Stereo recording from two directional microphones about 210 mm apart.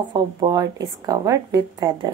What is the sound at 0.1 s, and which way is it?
A woman's voice, 20° right (ahead or behind).